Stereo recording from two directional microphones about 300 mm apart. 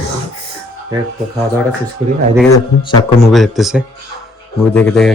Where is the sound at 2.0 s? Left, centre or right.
Centre.